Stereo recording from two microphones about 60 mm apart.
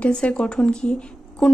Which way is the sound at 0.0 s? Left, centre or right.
Centre.